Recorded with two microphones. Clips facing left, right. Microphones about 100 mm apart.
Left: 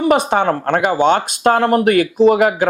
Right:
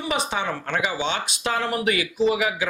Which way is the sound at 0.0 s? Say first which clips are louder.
Left 12 dB; 50° left (ahead or behind).